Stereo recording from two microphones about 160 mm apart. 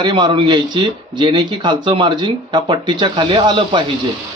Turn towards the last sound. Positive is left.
turn(degrees=-30)  # may be behind; listen again after turning